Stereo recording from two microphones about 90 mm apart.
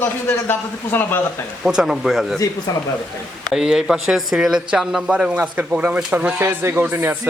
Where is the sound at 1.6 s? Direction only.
5° right (ahead or behind).